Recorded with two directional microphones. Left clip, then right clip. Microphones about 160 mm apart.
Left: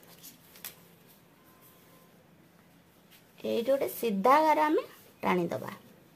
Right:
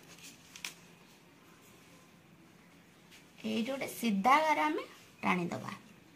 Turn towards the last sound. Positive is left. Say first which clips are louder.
# left 4 dB
turn(degrees=90)